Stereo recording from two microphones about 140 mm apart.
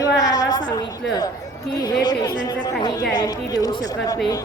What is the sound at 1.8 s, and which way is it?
A woman's voice, 25° left (ahead or behind).